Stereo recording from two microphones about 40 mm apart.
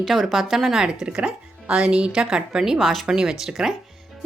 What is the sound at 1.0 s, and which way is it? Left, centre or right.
A woman's voice, right.